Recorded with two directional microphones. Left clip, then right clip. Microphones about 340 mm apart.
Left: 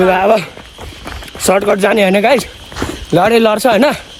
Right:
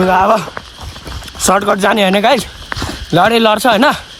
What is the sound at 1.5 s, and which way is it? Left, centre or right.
Speech, centre.